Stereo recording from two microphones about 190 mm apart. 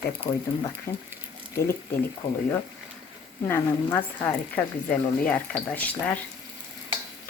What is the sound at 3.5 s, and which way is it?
Speech, 10° left (ahead or behind).